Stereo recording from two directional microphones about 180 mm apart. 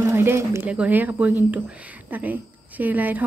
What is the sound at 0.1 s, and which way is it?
Speech, 15° right (ahead or behind).